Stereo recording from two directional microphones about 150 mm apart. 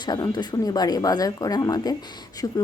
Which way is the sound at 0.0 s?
25° left (ahead or behind).